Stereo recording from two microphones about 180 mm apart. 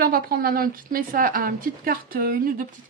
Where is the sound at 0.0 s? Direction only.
55° right (ahead or behind).